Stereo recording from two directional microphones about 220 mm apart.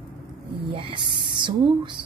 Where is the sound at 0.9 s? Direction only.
20° right (ahead or behind).